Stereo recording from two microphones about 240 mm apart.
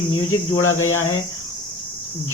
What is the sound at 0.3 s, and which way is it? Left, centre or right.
Speech, left.